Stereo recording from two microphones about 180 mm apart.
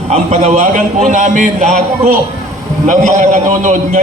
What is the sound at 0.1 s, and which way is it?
A man's voice, 40° right (ahead or behind).